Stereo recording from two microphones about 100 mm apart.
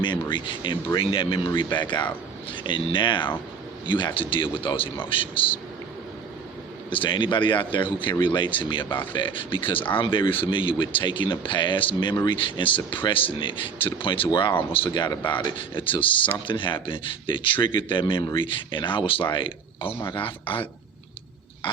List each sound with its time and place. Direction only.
0.0 s a man's voice: 50° left (ahead or behind)
1.5 s a man's voice: 45° left (ahead or behind)
6.9 s a man's voice: 50° left (ahead or behind)
15.3 s speech: 55° left (ahead or behind)